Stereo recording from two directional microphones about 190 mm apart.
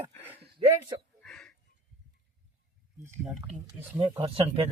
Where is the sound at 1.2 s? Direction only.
5° left (ahead or behind).